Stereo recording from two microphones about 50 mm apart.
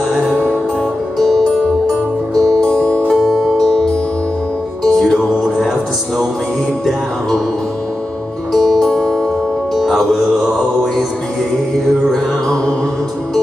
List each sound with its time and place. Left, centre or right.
0.1 s music: centre
2.6 s music: centre
4.8 s music: centre
6.9 s music: centre
8.5 s music: centre